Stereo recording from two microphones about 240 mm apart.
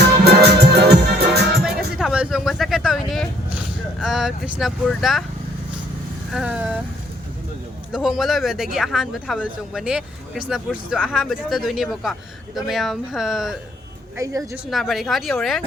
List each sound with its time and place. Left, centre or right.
0.3 s music: right
1.6 s vehicle: centre
4.0 s speech: centre
6.3 s speech: centre
7.9 s speech: centre
14.2 s speech: centre
14.7 s speech: centre